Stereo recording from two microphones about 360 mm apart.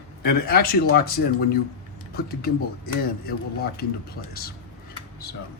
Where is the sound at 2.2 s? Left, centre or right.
Left.